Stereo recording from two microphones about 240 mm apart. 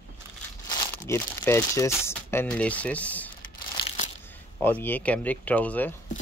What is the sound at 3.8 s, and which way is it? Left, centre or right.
Crunch, left.